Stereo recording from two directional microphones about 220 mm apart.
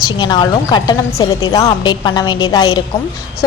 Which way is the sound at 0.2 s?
20° left (ahead or behind).